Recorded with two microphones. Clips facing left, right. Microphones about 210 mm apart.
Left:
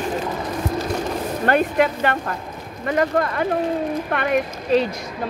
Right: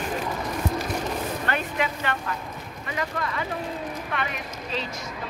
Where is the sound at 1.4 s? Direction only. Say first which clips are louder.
Left 14 dB; 50° left (ahead or behind).